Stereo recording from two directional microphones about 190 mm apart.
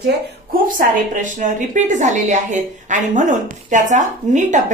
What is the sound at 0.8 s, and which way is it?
A woman's voice, 40° right (ahead or behind).